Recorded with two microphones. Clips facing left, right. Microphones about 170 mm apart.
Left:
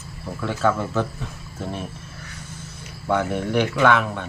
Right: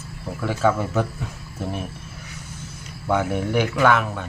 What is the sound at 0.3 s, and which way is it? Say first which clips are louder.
Speech: right 1 dB; 10° right (ahead or behind).